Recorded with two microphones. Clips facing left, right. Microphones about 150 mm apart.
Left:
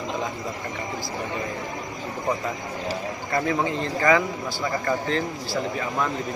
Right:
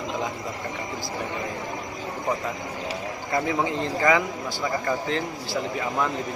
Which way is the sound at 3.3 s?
15° right (ahead or behind).